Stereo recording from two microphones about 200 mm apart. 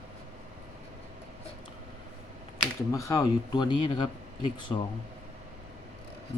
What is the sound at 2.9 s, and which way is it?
Speech, 15° left (ahead or behind).